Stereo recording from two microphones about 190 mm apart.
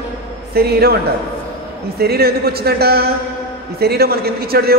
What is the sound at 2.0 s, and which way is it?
Speech, 55° right (ahead or behind).